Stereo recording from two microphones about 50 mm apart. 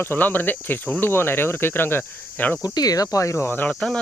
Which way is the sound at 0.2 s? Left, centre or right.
Left.